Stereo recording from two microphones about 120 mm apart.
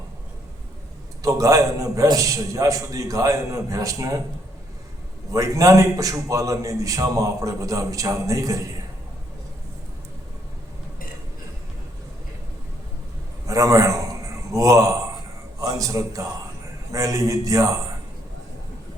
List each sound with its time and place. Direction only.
1.2 s a man's voice: 30° right (ahead or behind)
5.3 s a man's voice: 30° right (ahead or behind)
13.5 s a man's voice: 30° right (ahead or behind)